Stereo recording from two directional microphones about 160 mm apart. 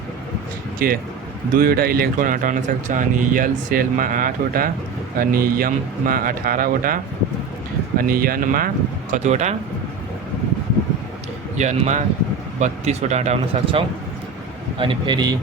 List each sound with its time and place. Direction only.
0.8 s speech: 70° right (ahead or behind)
9.1 s speech: 45° right (ahead or behind)
11.5 s speech: 45° right (ahead or behind); by 15.4 s 25° right (ahead or behind)